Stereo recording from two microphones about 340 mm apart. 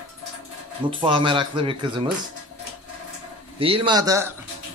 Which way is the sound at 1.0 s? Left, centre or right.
Centre.